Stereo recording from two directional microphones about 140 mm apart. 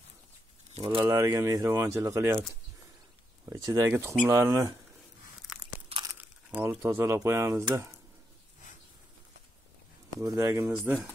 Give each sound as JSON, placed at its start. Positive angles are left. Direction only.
{"t": 0.8, "sound": "speech", "side_deg": -35}
{"t": 1.1, "sound": "speech", "side_deg": -20}
{"t": 3.4, "sound": "speech", "side_deg": -25}
{"t": 6.1, "sound": "speech", "side_deg": -10}
{"t": 10.2, "sound": "speech", "side_deg": -25}